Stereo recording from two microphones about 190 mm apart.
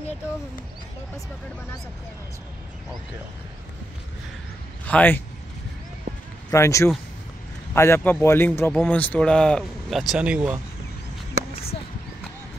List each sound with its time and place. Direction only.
4.8 s speech: 10° left (ahead or behind)
6.5 s a man's voice: 15° left (ahead or behind); by 10.6 s 5° right (ahead or behind)